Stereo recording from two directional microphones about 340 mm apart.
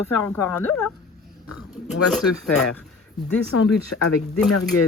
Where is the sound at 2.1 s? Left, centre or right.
Centre.